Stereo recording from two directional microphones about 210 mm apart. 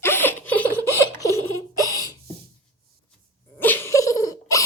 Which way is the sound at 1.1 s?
15° left (ahead or behind).